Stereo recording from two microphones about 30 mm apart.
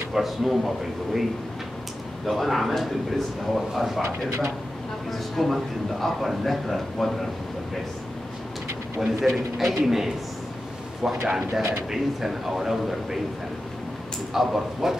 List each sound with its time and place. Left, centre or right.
0.2 s speech: centre
2.2 s speech: centre
5.3 s speech: centre
9.0 s speech: centre
14.5 s speech: centre